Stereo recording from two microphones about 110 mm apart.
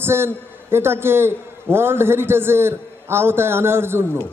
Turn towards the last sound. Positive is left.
turn(degrees=-20)  # may be behind; listen again after turning